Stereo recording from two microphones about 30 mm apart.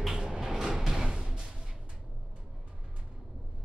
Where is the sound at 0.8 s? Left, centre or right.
Centre.